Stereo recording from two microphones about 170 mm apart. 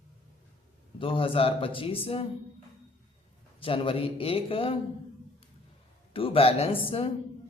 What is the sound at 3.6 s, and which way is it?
A man's voice, 30° left (ahead or behind).